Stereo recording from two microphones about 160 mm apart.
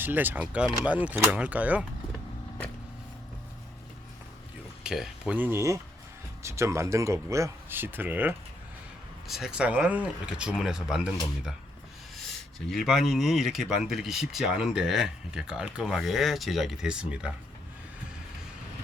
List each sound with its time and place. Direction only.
0.0 s speech: 10° right (ahead or behind)
4.8 s speech: 5° right (ahead or behind)